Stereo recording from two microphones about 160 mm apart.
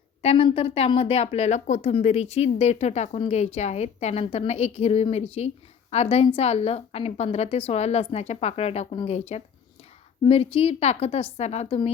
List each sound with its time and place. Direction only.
0.2 s a woman's voice: 35° left (ahead or behind)